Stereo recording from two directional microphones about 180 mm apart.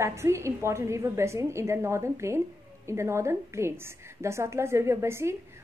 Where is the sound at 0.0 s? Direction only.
15° right (ahead or behind).